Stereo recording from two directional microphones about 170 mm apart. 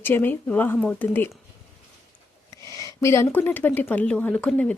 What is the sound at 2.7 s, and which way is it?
A woman's voice, 20° left (ahead or behind).